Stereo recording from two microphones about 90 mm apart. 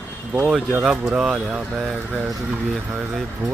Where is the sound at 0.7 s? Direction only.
10° right (ahead or behind).